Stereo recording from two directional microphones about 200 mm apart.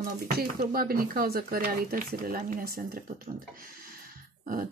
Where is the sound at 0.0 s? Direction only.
45° right (ahead or behind).